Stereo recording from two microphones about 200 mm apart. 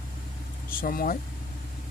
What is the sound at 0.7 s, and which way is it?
Speech, 45° left (ahead or behind).